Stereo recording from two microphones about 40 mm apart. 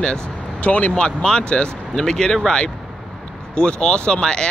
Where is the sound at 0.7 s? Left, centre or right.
Left.